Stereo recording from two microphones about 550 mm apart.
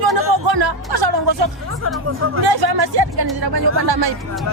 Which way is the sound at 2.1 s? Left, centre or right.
Right.